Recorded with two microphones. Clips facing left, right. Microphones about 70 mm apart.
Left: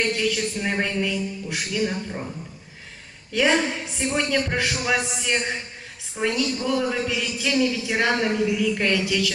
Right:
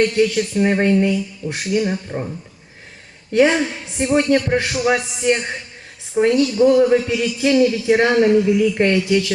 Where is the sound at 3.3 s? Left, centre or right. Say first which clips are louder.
Right 6 dB; right.